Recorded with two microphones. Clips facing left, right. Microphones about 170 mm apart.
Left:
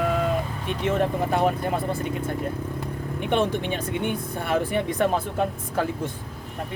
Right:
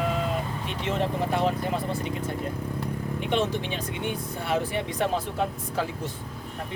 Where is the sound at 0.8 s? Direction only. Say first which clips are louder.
Left 4 dB; 50° left (ahead or behind).